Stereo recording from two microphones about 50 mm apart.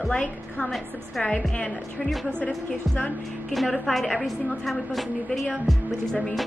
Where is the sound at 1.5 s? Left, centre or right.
Left.